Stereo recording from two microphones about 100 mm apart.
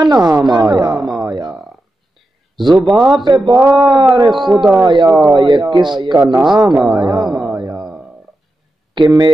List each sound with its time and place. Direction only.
0.0 s speech: 40° right (ahead or behind)
0.7 s a sound: 45° right (ahead or behind)
2.7 s a man's voice: centre (ahead or behind)
3.3 s speech: 45° right (ahead or behind)
6.7 s a man's voice: 5° right (ahead or behind)
7.0 s speech: 50° right (ahead or behind)
7.2 s a sound: 5° right (ahead or behind)
8.9 s speech: 50° right (ahead or behind)